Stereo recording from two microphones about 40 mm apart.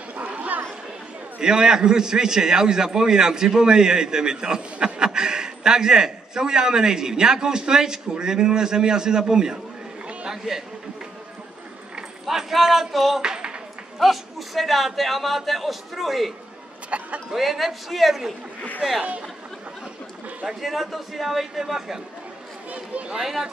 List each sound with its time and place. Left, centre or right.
0.1 s a sound: right
1.4 s a man's voice: centre
12.3 s a man's voice: centre
13.2 s a sound: centre
13.9 s a man's voice: centre
16.9 s speech: right
17.3 s a man's voice: centre
20.4 s a man's voice: centre
22.7 s run: right
23.1 s a man's voice: centre